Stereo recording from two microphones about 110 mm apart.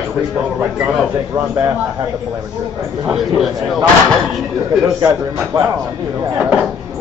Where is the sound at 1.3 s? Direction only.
25° right (ahead or behind).